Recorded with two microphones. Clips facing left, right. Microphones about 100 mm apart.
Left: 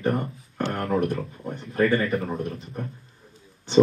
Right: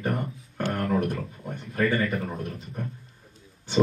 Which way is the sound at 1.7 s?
30° left (ahead or behind).